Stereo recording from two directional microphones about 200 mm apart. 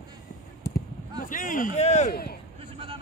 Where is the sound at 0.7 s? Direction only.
45° left (ahead or behind).